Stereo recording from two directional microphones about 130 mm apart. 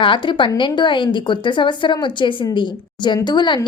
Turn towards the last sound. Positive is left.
turn(degrees=35)  # may be behind; listen again after turning